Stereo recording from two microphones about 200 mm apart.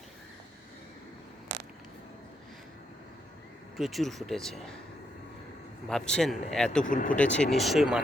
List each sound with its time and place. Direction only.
3.8 s speech: centre (ahead or behind)
5.9 s speech: 5° left (ahead or behind)
6.8 s speech: 40° left (ahead or behind)
7.3 s speech: centre (ahead or behind)